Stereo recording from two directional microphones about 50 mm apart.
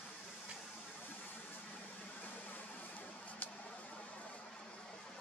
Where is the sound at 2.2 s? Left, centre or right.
Left.